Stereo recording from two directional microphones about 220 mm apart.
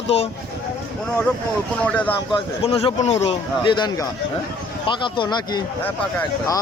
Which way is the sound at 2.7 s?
25° left (ahead or behind).